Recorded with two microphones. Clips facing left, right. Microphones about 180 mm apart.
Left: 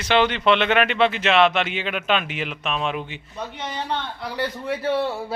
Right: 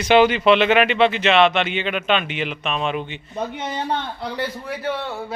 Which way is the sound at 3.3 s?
50° right (ahead or behind).